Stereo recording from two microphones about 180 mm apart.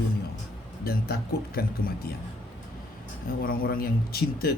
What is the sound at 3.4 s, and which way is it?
Speech, 55° left (ahead or behind).